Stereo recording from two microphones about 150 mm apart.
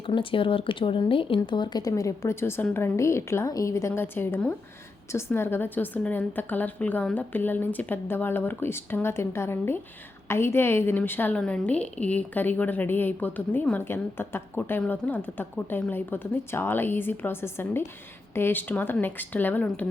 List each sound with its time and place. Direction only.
0.0 s a woman's voice: 35° left (ahead or behind); by 19.9 s 10° left (ahead or behind)